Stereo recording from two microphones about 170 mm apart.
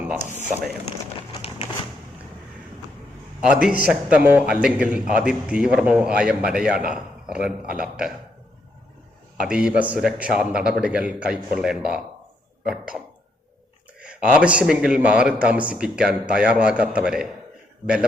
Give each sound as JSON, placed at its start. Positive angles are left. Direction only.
{"t": 0.0, "sound": "speech", "side_deg": -10}
{"t": 1.3, "sound": "a sound", "side_deg": 35}
{"t": 3.4, "sound": "a man's voice", "side_deg": -5}
{"t": 9.4, "sound": "a man's voice", "side_deg": -5}
{"t": 14.0, "sound": "a man's voice", "side_deg": -5}